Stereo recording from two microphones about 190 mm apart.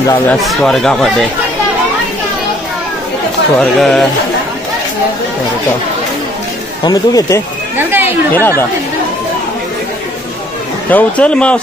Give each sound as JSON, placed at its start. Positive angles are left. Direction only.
{"t": 0.3, "sound": "speech", "side_deg": 0}
{"t": 3.5, "sound": "speech", "side_deg": 0}
{"t": 6.8, "sound": "speech", "side_deg": 20}
{"t": 7.7, "sound": "chatter", "side_deg": -10}
{"t": 8.3, "sound": "speech", "side_deg": 10}
{"t": 10.9, "sound": "speech", "side_deg": 5}